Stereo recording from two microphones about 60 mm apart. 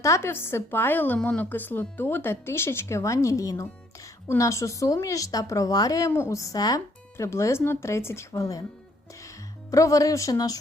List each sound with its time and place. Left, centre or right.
0.2 s a woman's voice: left
6.1 s speech: left
6.3 s speech: left
7.3 s speech: left
8.4 s a woman's voice: left
9.2 s speech: left